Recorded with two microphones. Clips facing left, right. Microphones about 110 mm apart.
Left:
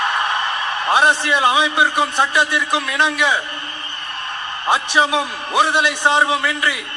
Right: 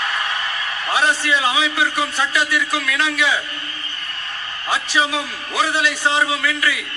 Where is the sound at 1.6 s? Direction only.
20° left (ahead or behind).